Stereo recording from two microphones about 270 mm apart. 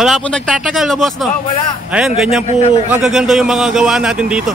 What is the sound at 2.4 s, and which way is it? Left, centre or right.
Speech, left.